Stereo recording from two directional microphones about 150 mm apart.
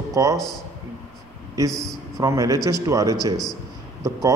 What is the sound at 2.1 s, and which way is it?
A man's voice, 20° right (ahead or behind).